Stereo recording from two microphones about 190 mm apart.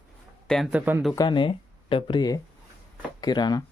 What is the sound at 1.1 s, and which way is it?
Speech, 25° left (ahead or behind).